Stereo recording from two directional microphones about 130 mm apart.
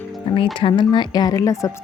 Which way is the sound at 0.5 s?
35° left (ahead or behind).